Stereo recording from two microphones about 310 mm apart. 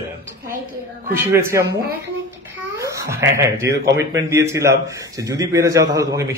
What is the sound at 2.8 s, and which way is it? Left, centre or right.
A man's voice, centre.